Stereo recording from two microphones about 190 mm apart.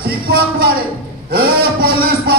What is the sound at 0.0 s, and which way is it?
Music, 55° right (ahead or behind).